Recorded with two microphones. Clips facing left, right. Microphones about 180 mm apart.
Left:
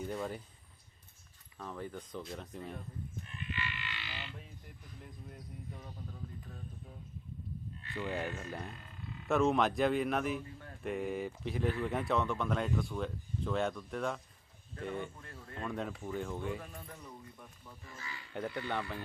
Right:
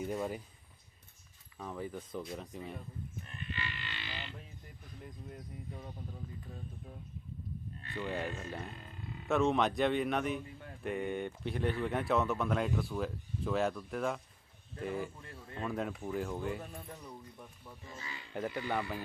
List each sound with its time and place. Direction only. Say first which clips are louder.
0.0 s speech: right 2 dB; 10° right (ahead or behind)
1.5 s speech: right 2 dB; 5° right (ahead or behind)
3.2 s a sound: left 1 dB; 35° right (ahead or behind)
5.0 s speech: right 3 dB; 5° right (ahead or behind)
7.9 s speech: even; centre (ahead or behind)
15.2 s speech: right 2 dB; 10° right (ahead or behind)
17.8 s speech: right 1 dB; 20° right (ahead or behind)
18.4 s speech: right 2 dB; 10° right (ahead or behind)